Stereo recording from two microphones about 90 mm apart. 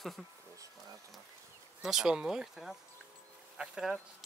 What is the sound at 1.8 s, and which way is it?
Speech, 5° right (ahead or behind).